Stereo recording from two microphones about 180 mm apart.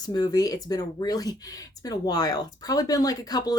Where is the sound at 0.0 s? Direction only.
20° left (ahead or behind).